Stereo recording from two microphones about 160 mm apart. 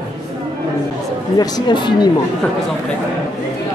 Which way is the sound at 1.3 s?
25° left (ahead or behind).